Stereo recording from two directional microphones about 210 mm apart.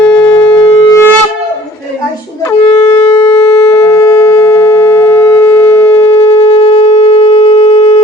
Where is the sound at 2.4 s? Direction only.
15° left (ahead or behind).